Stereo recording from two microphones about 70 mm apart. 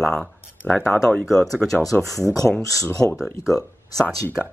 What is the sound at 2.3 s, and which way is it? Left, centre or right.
Speech, centre.